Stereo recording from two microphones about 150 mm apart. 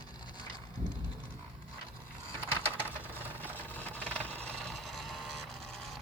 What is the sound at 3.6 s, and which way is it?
Vehicle, 10° left (ahead or behind).